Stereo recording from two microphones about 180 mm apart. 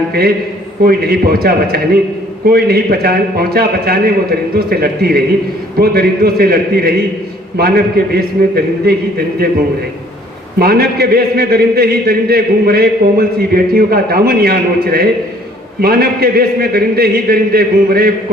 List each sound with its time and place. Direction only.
0.9 s a man's voice: 55° right (ahead or behind)
10.6 s a man's voice: 60° right (ahead or behind)